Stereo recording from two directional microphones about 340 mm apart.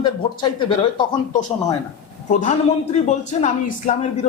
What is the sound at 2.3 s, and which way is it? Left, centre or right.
Speech, left.